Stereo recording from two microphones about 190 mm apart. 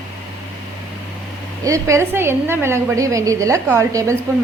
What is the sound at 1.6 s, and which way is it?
A woman's voice, 15° right (ahead or behind).